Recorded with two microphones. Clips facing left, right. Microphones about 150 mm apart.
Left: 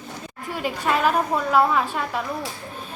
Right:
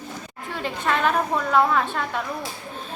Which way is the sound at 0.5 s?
10° left (ahead or behind).